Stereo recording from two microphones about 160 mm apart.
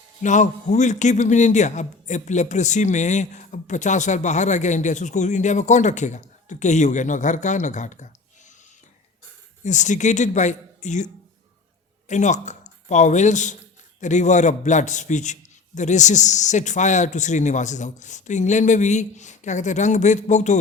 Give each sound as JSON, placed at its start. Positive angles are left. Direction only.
{"t": 0.2, "sound": "a man's voice", "side_deg": 50}
{"t": 9.6, "sound": "a man's voice", "side_deg": 50}